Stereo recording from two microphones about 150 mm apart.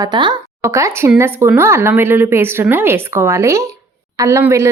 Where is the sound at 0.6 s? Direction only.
20° right (ahead or behind).